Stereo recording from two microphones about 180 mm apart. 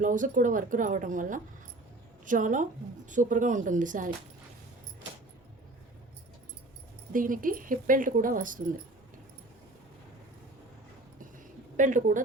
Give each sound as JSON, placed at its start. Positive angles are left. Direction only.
{"t": 0.0, "sound": "speech", "side_deg": -45}
{"t": 7.1, "sound": "speech", "side_deg": -50}
{"t": 11.8, "sound": "speech", "side_deg": -45}